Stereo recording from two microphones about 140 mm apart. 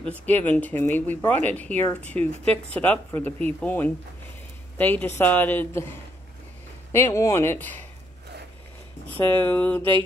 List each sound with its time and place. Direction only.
0.1 s speech: 10° left (ahead or behind)
6.9 s speech: 20° left (ahead or behind)
9.1 s speech: 15° left (ahead or behind)